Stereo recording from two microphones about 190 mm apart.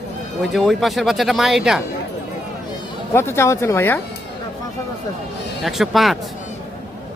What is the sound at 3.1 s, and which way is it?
Speech, 15° left (ahead or behind).